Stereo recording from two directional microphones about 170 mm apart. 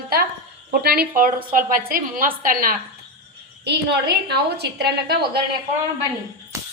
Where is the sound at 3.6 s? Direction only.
80° right.